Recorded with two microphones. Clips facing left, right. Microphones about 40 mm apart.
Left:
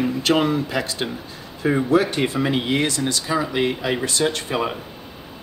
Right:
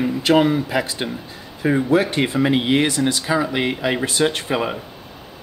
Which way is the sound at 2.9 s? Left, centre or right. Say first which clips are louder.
Right 3 dB; centre.